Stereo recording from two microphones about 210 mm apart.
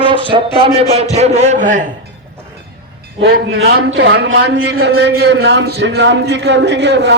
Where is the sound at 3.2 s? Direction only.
50° right (ahead or behind).